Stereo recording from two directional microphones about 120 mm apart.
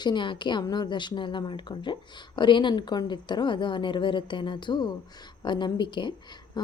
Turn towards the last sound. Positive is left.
turn(degrees=40)  # may be behind; listen again after turning